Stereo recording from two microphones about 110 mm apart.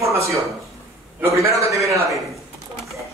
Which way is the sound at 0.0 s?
25° right (ahead or behind).